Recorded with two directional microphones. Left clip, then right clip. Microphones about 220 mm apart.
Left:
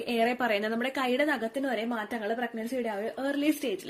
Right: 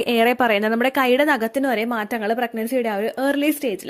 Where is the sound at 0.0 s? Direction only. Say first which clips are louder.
Right 10 dB; 40° right (ahead or behind).